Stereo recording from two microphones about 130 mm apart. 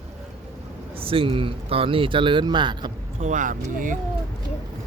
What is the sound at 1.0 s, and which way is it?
Speech, 45° right (ahead or behind).